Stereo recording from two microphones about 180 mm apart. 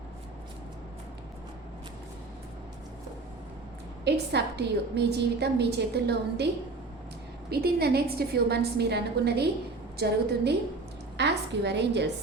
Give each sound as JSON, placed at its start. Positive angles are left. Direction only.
{"t": 4.0, "sound": "a woman's voice", "side_deg": -65}
{"t": 7.5, "sound": "a woman's voice", "side_deg": -60}
{"t": 11.2, "sound": "a woman's voice", "side_deg": -70}